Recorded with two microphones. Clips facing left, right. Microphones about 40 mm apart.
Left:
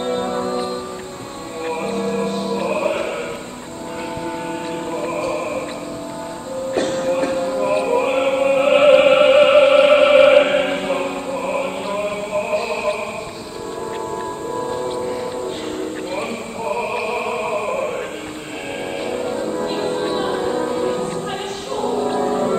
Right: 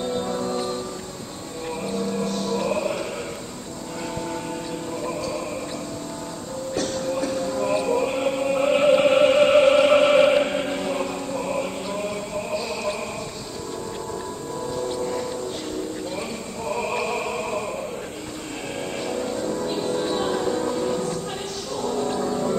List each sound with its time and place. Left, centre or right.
0.0 s music: left
1.7 s music: left
2.3 s music: left
4.9 s music: left
6.7 s music: left
7.5 s music: left
14.7 s music: left
16.2 s a sound: left
17.6 s music: left
19.0 s music: left
19.6 s music: left